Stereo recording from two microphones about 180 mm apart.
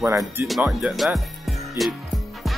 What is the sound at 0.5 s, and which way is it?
Speech, centre (ahead or behind).